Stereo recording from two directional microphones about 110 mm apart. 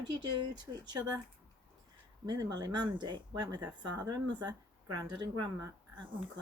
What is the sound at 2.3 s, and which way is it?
Speech, 40° right (ahead or behind).